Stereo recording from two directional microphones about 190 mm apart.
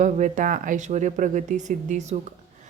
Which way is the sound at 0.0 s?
40° right (ahead or behind).